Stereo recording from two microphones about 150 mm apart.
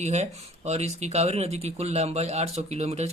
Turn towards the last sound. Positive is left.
turn(degrees=-45)  # may be behind; listen again after turning